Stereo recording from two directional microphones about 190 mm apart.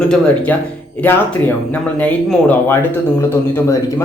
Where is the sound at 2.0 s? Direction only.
10° left (ahead or behind).